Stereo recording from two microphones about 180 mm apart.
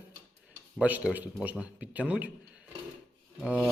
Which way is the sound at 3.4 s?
Centre (ahead or behind).